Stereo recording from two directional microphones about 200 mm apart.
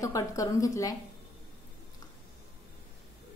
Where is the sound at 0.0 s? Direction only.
15° left (ahead or behind).